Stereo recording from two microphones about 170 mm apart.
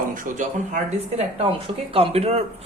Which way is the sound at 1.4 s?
35° right (ahead or behind).